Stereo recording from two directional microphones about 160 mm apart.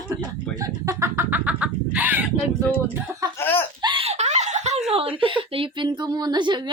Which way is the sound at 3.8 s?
30° right (ahead or behind).